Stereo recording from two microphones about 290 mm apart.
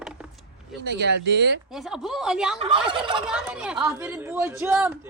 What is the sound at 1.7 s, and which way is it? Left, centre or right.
Speech, centre.